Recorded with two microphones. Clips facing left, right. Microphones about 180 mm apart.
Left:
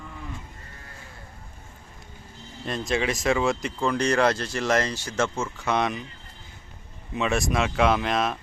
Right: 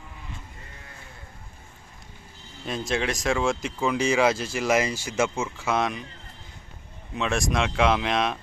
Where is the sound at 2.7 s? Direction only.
Centre (ahead or behind).